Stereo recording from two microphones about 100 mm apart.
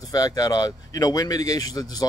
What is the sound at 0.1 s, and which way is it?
Speech, 40° left (ahead or behind).